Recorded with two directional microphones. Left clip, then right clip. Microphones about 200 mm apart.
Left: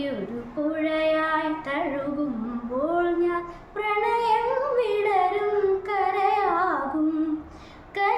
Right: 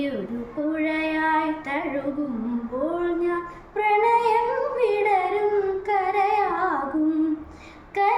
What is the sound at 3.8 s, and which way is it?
Female singing, 10° left (ahead or behind).